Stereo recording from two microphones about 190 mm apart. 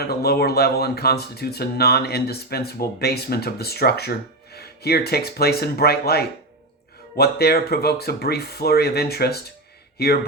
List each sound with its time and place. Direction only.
0.0 s speech: 55° left (ahead or behind)